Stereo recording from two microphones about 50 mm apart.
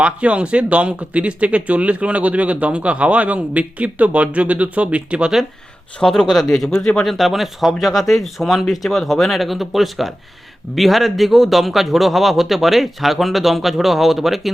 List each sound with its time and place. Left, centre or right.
0.0 s speech: right
6.1 s a man's voice: centre